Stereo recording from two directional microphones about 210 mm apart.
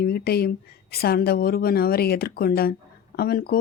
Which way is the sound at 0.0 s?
50° left (ahead or behind).